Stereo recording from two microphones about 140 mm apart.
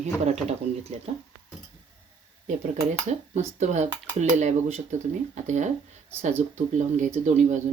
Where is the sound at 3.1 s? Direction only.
55° right (ahead or behind).